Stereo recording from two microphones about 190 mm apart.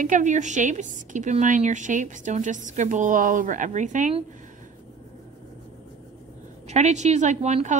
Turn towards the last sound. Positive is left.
turn(degrees=-40)  # may be behind; listen again after turning